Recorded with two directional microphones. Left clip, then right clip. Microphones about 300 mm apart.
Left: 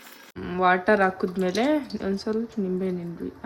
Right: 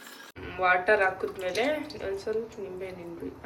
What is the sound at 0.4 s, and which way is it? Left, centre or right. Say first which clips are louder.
Speech: left 3 dB; left.